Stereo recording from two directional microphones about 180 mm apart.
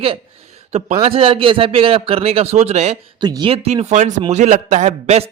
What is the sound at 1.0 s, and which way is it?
A man's voice, 30° right (ahead or behind).